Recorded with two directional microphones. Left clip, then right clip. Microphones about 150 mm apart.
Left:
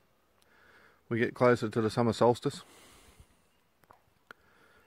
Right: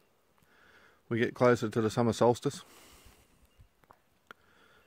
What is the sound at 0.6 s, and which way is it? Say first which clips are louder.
Speech: even; 10° right (ahead or behind).